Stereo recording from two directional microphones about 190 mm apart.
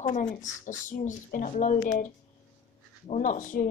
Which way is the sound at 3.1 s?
40° left (ahead or behind).